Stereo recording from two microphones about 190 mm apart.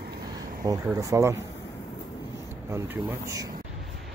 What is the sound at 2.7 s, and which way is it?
Speech, 15° right (ahead or behind).